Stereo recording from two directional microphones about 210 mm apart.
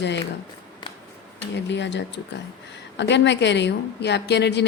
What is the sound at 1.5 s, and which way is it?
A woman's voice, 55° left (ahead or behind).